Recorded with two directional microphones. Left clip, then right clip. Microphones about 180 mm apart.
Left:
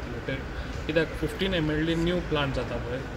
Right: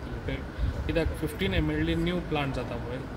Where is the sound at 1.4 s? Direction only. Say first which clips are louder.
Left 2 dB; 35° right (ahead or behind).